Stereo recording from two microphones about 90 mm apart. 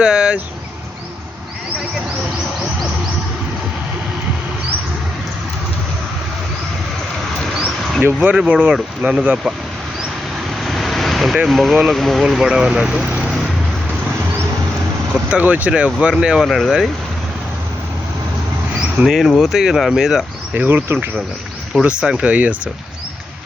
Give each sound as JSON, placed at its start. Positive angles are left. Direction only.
{"t": 0.0, "sound": "speech", "side_deg": -10}
{"t": 8.0, "sound": "speech", "side_deg": -15}
{"t": 10.6, "sound": "vehicle", "side_deg": 0}
{"t": 11.4, "sound": "speech", "side_deg": 0}
{"t": 15.1, "sound": "speech", "side_deg": -15}
{"t": 16.4, "sound": "speech", "side_deg": 0}
{"t": 18.8, "sound": "a sound", "side_deg": -5}
{"t": 19.4, "sound": "speech", "side_deg": -5}
{"t": 20.5, "sound": "speech", "side_deg": -20}
{"t": 21.7, "sound": "speech", "side_deg": -10}